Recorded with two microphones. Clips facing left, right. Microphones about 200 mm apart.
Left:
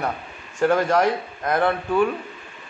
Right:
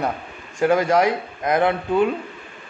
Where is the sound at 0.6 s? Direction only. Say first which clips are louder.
Right 1 dB; 10° right (ahead or behind).